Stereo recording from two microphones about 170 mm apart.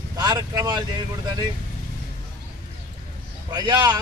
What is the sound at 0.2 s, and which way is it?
Speech, 20° right (ahead or behind).